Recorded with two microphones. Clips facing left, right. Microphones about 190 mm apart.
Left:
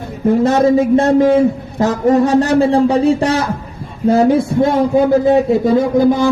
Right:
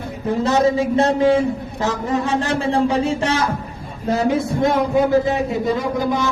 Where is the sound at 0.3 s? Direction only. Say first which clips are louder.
Left 6 dB; 50° left (ahead or behind); by 5.4 s 35° left (ahead or behind).